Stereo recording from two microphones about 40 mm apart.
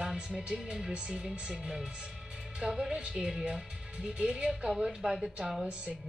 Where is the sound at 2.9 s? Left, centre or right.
Right.